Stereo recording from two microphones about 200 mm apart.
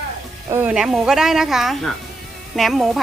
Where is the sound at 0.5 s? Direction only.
5° right (ahead or behind).